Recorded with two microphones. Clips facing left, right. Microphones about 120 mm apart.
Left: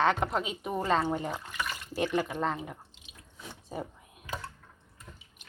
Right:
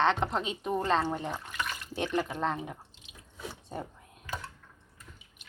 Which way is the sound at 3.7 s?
5° left (ahead or behind).